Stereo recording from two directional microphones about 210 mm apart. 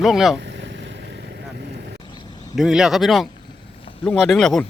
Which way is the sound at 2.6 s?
Centre (ahead or behind).